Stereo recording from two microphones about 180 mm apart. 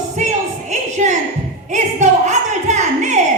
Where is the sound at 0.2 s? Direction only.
40° right (ahead or behind).